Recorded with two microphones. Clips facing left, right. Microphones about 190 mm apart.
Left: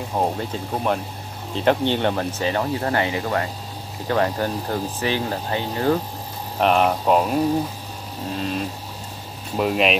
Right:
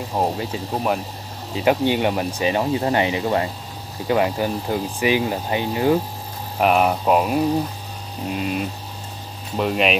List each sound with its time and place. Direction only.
0.2 s speech: 5° right (ahead or behind)
9.6 s speech: centre (ahead or behind)